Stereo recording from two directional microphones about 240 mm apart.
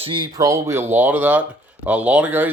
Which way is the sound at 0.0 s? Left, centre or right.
Right.